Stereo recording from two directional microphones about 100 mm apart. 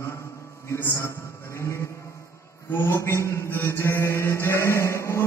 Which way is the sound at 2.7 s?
25° left (ahead or behind).